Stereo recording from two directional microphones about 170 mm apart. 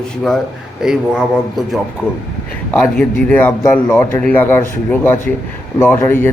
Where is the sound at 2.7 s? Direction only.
10° left (ahead or behind).